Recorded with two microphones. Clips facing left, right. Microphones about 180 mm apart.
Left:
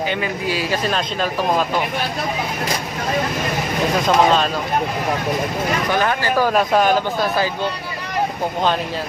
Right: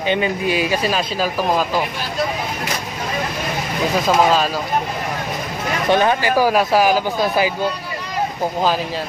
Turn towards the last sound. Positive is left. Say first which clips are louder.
# right 2 dB
turn(degrees=-10)  # may be behind; listen again after turning